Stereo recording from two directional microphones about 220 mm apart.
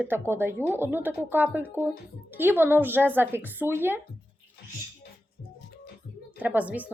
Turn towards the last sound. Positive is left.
turn(degrees=-5)  # may be behind; listen again after turning